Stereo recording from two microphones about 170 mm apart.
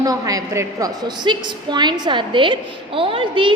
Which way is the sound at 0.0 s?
20° right (ahead or behind).